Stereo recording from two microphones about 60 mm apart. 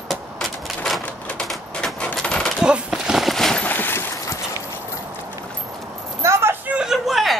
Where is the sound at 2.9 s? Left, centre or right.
Centre.